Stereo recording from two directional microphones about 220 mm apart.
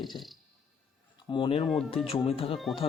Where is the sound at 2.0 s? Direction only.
25° left (ahead or behind).